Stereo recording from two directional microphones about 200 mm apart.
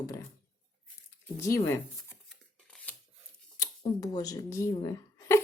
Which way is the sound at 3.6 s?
20° left (ahead or behind).